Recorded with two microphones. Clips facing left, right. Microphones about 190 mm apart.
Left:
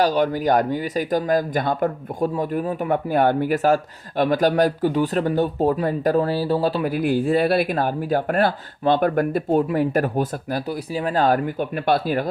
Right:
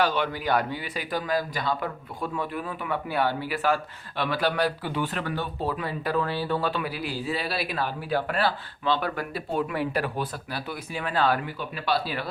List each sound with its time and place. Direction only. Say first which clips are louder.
0.0 s speech: left 7 dB; 40° left (ahead or behind)